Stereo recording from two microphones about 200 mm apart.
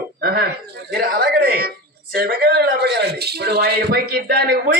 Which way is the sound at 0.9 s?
50° right (ahead or behind).